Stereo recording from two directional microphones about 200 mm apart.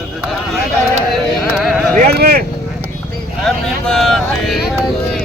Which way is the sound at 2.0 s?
45° right (ahead or behind).